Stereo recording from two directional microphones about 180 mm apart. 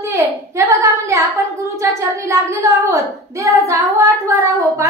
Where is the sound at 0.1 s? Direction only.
15° right (ahead or behind).